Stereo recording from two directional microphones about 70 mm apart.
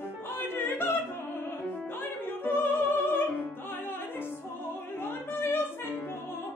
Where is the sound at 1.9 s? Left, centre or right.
Left.